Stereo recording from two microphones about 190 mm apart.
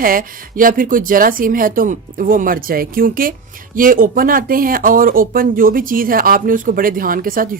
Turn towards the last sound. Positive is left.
turn(degrees=-50)  # may be behind; listen again after turning